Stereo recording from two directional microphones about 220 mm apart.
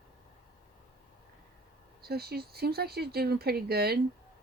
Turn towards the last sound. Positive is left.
turn(degrees=-45)  # may be behind; listen again after turning